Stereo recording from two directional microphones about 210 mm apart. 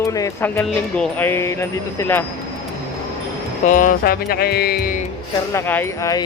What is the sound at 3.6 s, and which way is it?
Speech, 35° left (ahead or behind).